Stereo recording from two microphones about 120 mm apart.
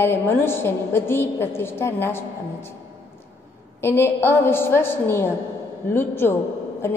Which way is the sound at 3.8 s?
20° left (ahead or behind).